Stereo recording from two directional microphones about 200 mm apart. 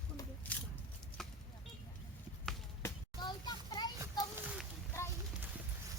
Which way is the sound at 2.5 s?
Centre (ahead or behind).